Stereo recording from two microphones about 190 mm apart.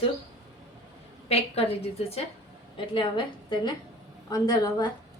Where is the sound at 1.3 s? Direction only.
30° left (ahead or behind).